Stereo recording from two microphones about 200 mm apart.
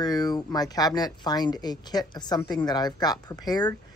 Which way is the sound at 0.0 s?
20° left (ahead or behind).